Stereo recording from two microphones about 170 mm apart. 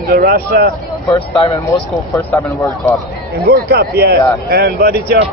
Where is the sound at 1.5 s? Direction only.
20° left (ahead or behind).